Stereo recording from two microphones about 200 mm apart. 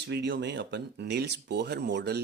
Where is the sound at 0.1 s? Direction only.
60° right (ahead or behind).